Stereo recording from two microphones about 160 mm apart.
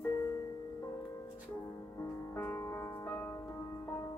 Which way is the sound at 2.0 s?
15° left (ahead or behind).